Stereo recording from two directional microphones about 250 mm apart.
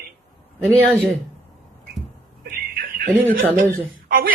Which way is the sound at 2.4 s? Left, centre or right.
Right.